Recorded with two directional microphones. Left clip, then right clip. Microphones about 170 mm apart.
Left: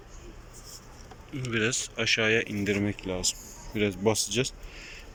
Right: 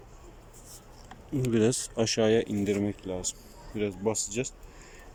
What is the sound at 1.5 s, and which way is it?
Speech, 35° right (ahead or behind).